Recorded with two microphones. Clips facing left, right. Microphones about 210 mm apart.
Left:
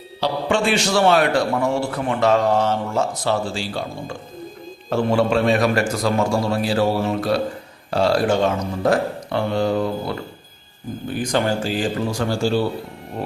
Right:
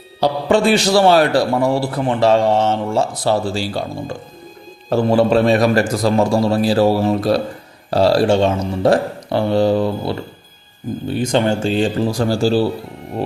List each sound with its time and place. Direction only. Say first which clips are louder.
0.2 s a man's voice: right 5 dB; 40° right (ahead or behind)
11.1 s a man's voice: right 4 dB; 25° right (ahead or behind)